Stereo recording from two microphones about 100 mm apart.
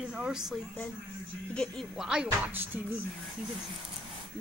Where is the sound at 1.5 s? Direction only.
5° left (ahead or behind).